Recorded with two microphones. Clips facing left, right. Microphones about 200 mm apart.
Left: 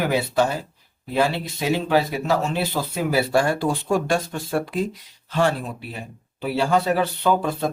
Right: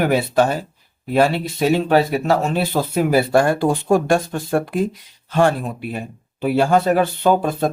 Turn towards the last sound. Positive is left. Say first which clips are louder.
# right 4 dB
turn(degrees=-50)  # may be behind; listen again after turning